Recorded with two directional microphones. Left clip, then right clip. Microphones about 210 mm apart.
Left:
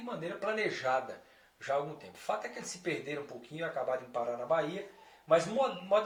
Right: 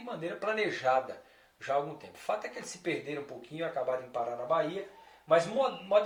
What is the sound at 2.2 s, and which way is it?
Speech, 25° right (ahead or behind).